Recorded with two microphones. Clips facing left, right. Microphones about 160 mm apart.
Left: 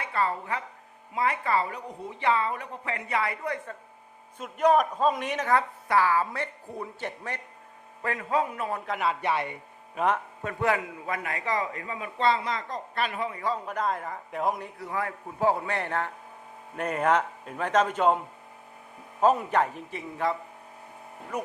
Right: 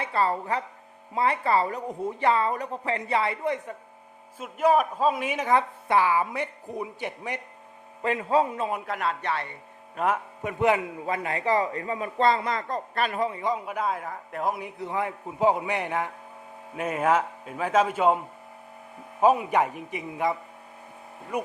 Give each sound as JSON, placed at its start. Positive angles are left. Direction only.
{"t": 0.0, "sound": "a woman's voice", "side_deg": -30}
{"t": 4.4, "sound": "a man's voice", "side_deg": -5}
{"t": 5.5, "sound": "a woman's voice", "side_deg": -20}
{"t": 8.8, "sound": "a man's voice", "side_deg": 0}
{"t": 9.2, "sound": "speech", "side_deg": 15}
{"t": 9.9, "sound": "speech", "side_deg": 0}
{"t": 10.4, "sound": "a man's voice", "side_deg": -20}
{"t": 11.0, "sound": "a woman's voice", "side_deg": -30}
{"t": 13.3, "sound": "a man's voice", "side_deg": -15}
{"t": 14.6, "sound": "a woman's voice", "side_deg": -20}
{"t": 19.2, "sound": "a woman's voice", "side_deg": -10}
{"t": 21.3, "sound": "a woman's voice", "side_deg": -10}